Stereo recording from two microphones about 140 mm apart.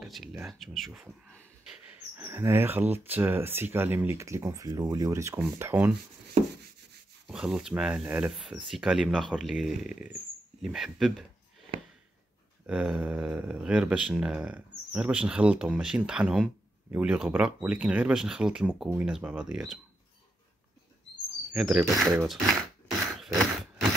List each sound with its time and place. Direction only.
0.0 s speech: 5° right (ahead or behind)
1.7 s speech: 15° right (ahead or behind)
6.4 s a sound: 50° right (ahead or behind)
7.2 s speech: 5° right (ahead or behind)
12.6 s speech: 10° right (ahead or behind)
21.5 s speech: centre (ahead or behind)